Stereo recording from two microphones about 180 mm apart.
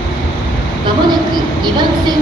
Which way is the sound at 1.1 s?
25° right (ahead or behind).